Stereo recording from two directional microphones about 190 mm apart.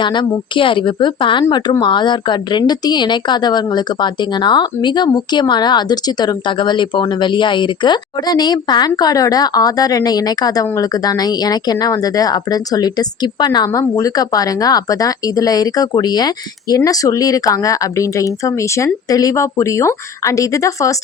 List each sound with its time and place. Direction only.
0.0 s a woman's voice: 25° left (ahead or behind)